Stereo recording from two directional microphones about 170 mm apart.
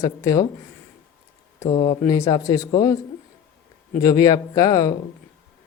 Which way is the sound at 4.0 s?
20° left (ahead or behind).